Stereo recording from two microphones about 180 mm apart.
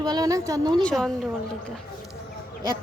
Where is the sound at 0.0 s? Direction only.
20° right (ahead or behind).